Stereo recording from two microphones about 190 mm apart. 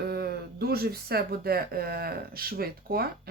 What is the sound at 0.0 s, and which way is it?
Speech, 55° right (ahead or behind).